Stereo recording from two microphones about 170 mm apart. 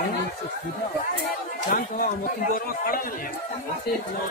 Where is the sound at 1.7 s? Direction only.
50° left (ahead or behind).